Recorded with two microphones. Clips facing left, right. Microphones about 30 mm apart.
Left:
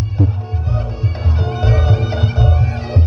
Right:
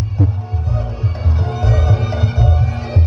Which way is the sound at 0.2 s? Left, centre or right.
Centre.